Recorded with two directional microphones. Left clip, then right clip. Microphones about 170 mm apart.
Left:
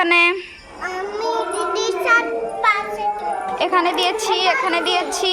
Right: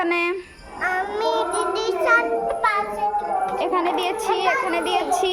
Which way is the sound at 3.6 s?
Centre (ahead or behind).